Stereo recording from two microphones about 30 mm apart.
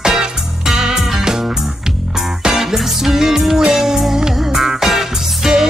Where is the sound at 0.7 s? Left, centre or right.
Centre.